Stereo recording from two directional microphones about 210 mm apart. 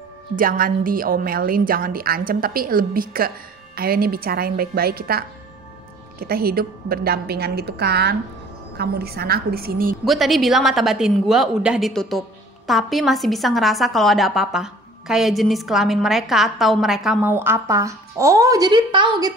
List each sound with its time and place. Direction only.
0.4 s a woman's voice: 40° right (ahead or behind)
10.0 s a woman's voice: centre (ahead or behind); by 19.3 s 20° right (ahead or behind)